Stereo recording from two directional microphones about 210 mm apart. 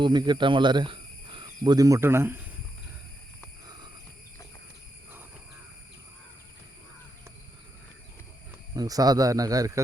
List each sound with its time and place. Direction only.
0.0 s speech: 20° right (ahead or behind)
8.7 s speech: 15° right (ahead or behind)